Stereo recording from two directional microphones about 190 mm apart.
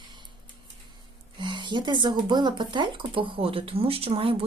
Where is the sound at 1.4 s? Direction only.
25° right (ahead or behind).